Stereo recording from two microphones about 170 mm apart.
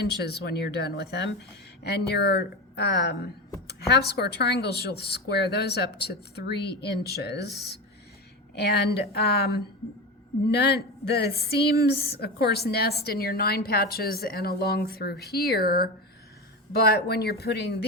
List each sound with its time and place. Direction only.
0.2 s a woman's voice: 70° left (ahead or behind)
10.5 s a woman's voice: 70° left (ahead or behind)